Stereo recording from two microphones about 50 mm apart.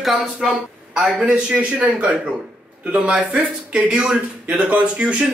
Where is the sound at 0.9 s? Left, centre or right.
Right.